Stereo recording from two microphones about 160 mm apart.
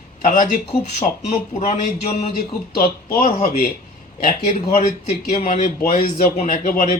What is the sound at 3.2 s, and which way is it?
Speech, 55° left (ahead or behind).